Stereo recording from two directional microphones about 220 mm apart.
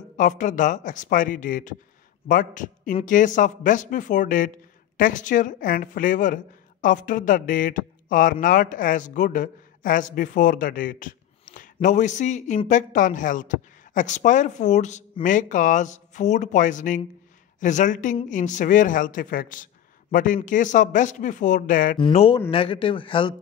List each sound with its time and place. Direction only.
0.2 s a woman's voice: 35° left (ahead or behind)
21.9 s a man's voice: 25° left (ahead or behind)